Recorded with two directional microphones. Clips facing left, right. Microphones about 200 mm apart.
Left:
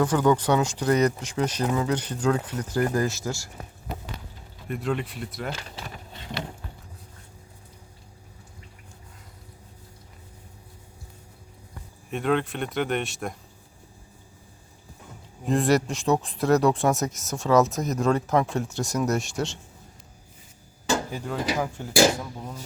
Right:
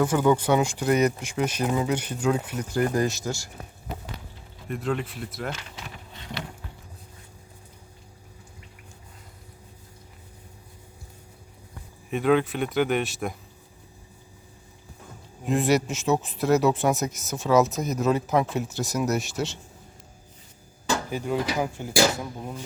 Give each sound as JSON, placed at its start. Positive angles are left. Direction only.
{"t": 0.0, "sound": "speech", "side_deg": -10}
{"t": 4.8, "sound": "speech", "side_deg": 0}
{"t": 5.5, "sound": "speech", "side_deg": 35}
{"t": 12.1, "sound": "speech", "side_deg": -5}
{"t": 15.4, "sound": "speech", "side_deg": 0}
{"t": 21.1, "sound": "speech", "side_deg": -15}